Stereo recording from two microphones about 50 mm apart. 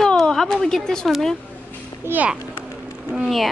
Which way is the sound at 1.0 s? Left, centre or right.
Centre.